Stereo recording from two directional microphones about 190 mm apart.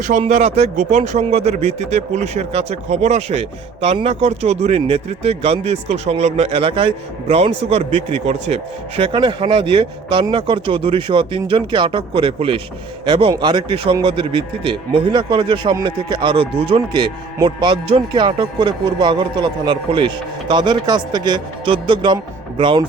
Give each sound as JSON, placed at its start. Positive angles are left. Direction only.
{"t": 0.0, "sound": "a man's voice", "side_deg": -40}